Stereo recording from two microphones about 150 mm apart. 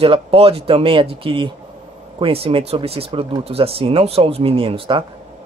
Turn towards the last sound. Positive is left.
turn(degrees=-35)  # may be behind; listen again after turning